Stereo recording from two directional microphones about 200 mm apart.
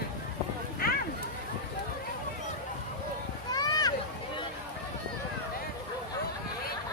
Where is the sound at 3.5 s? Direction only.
20° left (ahead or behind).